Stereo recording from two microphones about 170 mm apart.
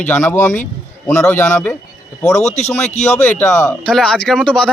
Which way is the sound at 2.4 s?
40° left (ahead or behind).